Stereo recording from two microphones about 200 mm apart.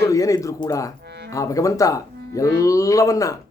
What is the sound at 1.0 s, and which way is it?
Music, 55° right (ahead or behind).